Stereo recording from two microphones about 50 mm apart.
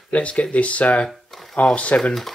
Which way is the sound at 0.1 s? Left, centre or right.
Left.